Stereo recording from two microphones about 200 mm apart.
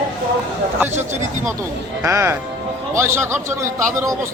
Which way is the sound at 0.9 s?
35° right (ahead or behind).